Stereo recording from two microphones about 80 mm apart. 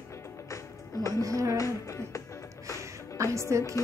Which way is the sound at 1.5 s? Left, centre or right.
Left.